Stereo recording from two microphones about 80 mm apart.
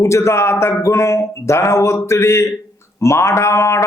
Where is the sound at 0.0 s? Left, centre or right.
Left.